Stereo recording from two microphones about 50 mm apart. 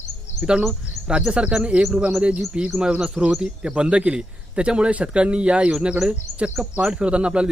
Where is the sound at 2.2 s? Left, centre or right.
Right.